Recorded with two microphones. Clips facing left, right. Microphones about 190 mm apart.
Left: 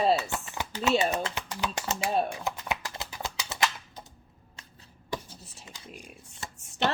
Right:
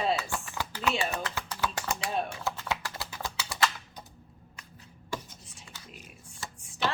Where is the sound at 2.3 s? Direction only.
15° left (ahead or behind).